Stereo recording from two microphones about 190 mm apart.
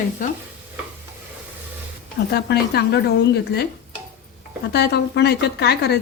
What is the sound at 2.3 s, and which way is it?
Speech, 60° left (ahead or behind).